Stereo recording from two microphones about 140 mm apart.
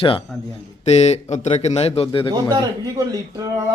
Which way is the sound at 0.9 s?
50° left (ahead or behind).